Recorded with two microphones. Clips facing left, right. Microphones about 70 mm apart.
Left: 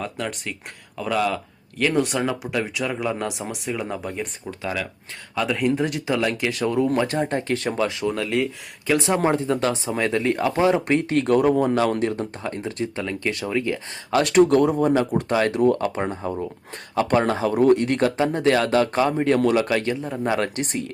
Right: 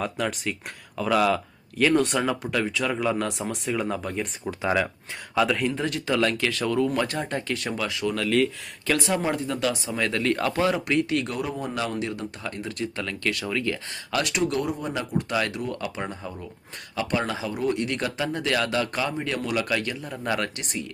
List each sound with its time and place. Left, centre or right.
0.0 s speech: centre
4.4 s speech: centre
5.3 s speech: centre
5.6 s speech: centre; by 11.3 s left
11.3 s speech: left
14.2 s speech: left
20.6 s speech: left